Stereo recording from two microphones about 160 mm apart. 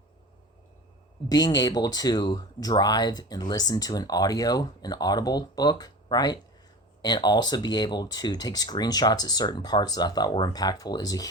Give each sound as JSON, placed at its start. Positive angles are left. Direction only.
{"t": 1.3, "sound": "speech", "side_deg": 25}